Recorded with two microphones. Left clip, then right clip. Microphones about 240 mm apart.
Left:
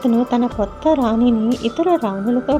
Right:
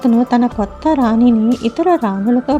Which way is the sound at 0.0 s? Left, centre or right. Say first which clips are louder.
Right 4 dB; right.